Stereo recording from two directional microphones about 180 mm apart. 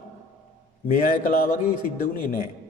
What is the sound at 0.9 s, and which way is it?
A man's voice, 45° left (ahead or behind).